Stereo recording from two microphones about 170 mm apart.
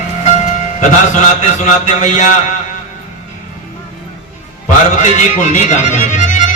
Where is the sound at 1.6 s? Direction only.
45° left (ahead or behind).